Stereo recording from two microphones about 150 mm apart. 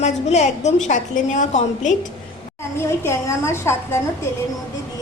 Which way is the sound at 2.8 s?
15° left (ahead or behind).